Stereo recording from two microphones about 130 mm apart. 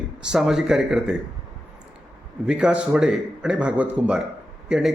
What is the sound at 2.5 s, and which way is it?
Speech, 10° right (ahead or behind).